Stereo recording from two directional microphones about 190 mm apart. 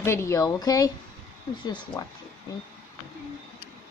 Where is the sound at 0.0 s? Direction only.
15° left (ahead or behind).